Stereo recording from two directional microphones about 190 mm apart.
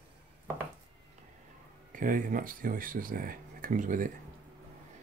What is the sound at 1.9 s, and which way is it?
Speech, 45° right (ahead or behind).